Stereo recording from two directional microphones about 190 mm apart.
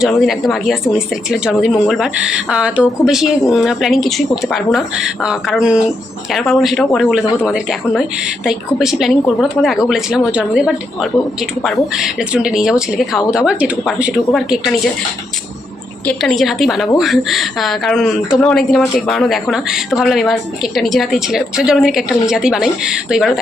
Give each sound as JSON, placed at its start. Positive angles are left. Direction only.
{"t": 0.0, "sound": "speech", "side_deg": 0}
{"t": 16.0, "sound": "speech", "side_deg": 0}